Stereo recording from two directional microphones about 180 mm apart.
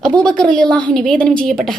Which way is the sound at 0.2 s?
5° left (ahead or behind).